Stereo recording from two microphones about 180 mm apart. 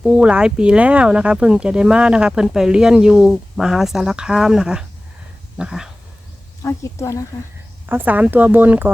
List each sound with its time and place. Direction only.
0.0 s speech: 5° right (ahead or behind)
6.6 s speech: 15° left (ahead or behind)
7.9 s speech: 10° right (ahead or behind)